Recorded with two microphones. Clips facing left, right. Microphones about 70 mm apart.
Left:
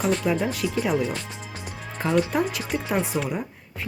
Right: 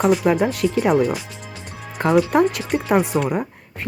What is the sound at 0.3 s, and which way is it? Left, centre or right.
Speech, right.